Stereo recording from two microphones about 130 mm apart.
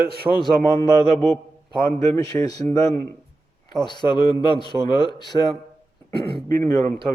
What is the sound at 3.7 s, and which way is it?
A man's voice, 35° left (ahead or behind).